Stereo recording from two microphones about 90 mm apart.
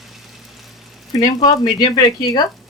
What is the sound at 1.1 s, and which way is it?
Speech, 50° left (ahead or behind).